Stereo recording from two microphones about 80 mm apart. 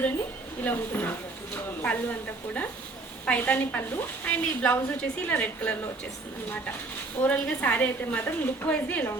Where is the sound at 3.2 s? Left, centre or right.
Centre.